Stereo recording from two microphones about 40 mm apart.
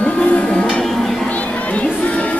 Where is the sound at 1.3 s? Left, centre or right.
Left.